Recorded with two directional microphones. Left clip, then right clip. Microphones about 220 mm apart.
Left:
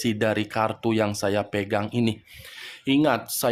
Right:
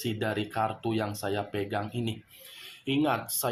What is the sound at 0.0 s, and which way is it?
Speech, 45° left (ahead or behind).